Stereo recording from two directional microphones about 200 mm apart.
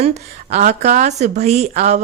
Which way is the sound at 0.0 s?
35° right (ahead or behind).